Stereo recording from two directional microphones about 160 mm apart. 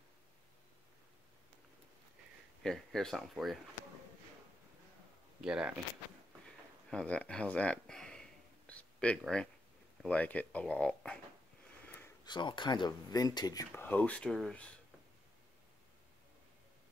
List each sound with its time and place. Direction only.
2.6 s speech: 5° left (ahead or behind)
5.4 s speech: 5° right (ahead or behind)
6.9 s speech: 5° left (ahead or behind)
12.3 s speech: 30° left (ahead or behind); by 14.7 s 5° left (ahead or behind)